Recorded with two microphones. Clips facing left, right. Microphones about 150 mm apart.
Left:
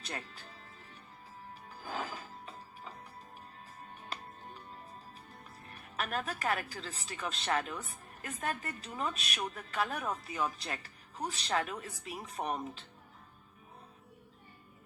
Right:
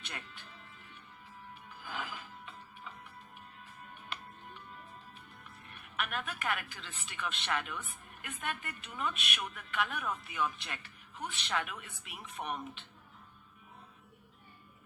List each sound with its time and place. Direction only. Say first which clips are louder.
0.0 s speech: left 4 dB; 35° left (ahead or behind)
1.8 s music: left 3 dB; 35° left (ahead or behind)
5.6 s speech: left 1 dB; 35° left (ahead or behind)